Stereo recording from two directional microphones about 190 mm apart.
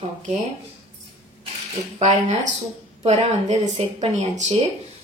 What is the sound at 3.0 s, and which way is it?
Speech, 35° right (ahead or behind).